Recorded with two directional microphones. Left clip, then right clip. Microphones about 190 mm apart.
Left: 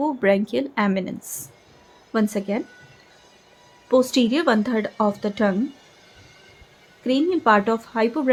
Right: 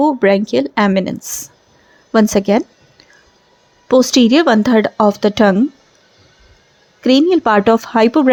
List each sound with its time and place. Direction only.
0.0 s a woman's voice: 35° right (ahead or behind)
3.8 s speech: 45° right (ahead or behind)
7.0 s speech: 50° right (ahead or behind)